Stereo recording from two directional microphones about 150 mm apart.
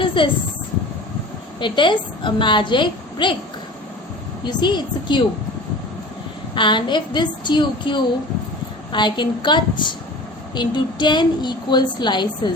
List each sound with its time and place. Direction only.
0.0 s a sound: 35° left (ahead or behind)
1.5 s a woman's voice: 30° left (ahead or behind)
4.4 s a woman's voice: 30° left (ahead or behind)
6.5 s a woman's voice: 30° left (ahead or behind)